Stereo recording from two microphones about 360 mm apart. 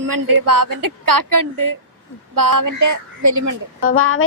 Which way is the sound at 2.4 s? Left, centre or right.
Right.